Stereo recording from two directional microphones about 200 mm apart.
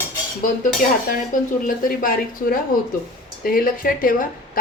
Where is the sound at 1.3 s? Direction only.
40° left (ahead or behind).